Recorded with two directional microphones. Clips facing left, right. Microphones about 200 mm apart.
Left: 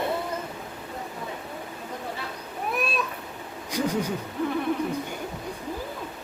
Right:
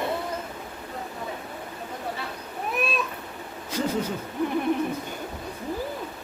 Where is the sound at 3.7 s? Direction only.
15° left (ahead or behind).